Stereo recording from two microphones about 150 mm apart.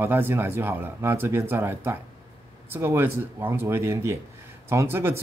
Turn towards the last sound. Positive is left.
turn(degrees=-15)  # may be behind; listen again after turning